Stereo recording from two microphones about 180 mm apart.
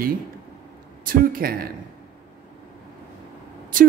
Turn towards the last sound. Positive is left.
turn(degrees=-50)  # may be behind; listen again after turning